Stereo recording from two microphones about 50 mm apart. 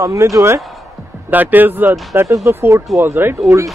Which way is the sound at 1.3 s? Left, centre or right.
Right.